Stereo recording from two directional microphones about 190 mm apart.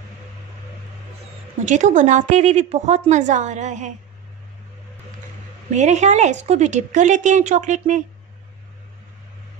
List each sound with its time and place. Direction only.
1.6 s a woman's voice: 40° right (ahead or behind)
5.7 s a woman's voice: 40° right (ahead or behind)